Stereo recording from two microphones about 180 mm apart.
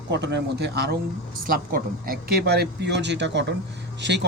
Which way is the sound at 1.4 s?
50° right (ahead or behind).